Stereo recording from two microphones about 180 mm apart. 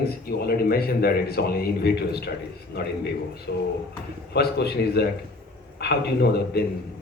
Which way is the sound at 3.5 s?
65° left (ahead or behind).